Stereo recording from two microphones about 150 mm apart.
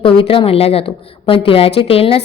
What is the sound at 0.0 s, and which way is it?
A woman's voice, 35° left (ahead or behind).